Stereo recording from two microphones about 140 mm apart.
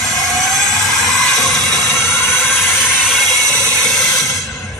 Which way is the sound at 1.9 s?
20° left (ahead or behind).